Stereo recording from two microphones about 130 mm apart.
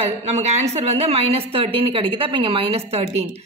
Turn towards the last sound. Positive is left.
turn(degrees=-50)  # may be behind; listen again after turning